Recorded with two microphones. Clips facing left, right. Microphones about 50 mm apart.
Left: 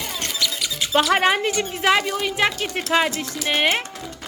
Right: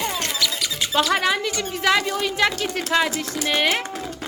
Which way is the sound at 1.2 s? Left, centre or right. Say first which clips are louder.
Left 3 dB; left.